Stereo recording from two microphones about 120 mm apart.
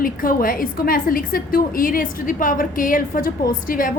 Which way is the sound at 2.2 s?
90° left.